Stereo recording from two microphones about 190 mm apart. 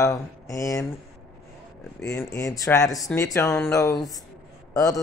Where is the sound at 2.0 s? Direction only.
15° left (ahead or behind).